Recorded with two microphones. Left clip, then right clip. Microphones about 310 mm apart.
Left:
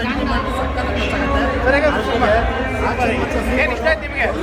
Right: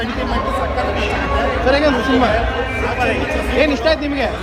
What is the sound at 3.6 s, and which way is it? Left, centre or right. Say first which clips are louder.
Speech: right 4 dB; centre.